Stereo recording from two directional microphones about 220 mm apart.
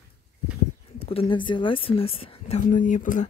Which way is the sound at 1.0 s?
25° left (ahead or behind).